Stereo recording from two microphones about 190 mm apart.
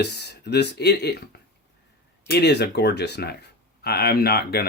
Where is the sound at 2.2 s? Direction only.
60° left (ahead or behind).